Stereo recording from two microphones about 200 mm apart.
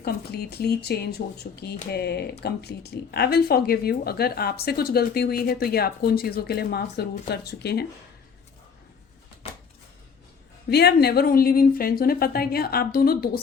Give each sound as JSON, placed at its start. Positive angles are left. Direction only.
{"t": 0.0, "sound": "speech", "side_deg": 55}
{"t": 1.2, "sound": "speech", "side_deg": 40}
{"t": 1.9, "sound": "speech", "side_deg": 55}
{"t": 9.4, "sound": "a sound", "side_deg": 30}
{"t": 10.7, "sound": "speech", "side_deg": 55}